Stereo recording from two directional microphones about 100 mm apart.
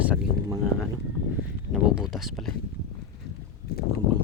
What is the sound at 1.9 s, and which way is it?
Speech, 5° right (ahead or behind).